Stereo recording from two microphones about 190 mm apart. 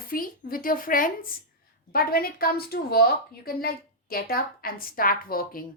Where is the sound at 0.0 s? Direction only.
50° left (ahead or behind).